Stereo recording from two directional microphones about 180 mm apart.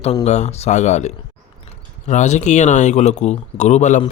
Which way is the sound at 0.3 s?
40° left (ahead or behind).